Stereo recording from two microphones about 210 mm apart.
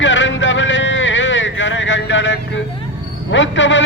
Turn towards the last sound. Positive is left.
turn(degrees=60)  # may be behind; listen again after turning